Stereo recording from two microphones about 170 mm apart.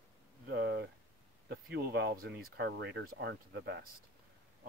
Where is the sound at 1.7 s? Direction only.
75° right (ahead or behind).